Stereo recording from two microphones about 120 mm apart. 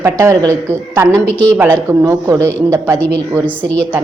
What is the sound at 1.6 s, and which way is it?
A woman's voice, 30° right (ahead or behind).